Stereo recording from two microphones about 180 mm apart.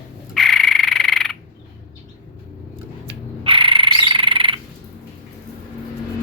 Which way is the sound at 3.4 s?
30° right (ahead or behind).